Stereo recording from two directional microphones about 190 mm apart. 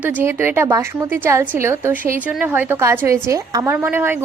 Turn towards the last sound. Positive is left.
turn(degrees=-10)  # may be behind; listen again after turning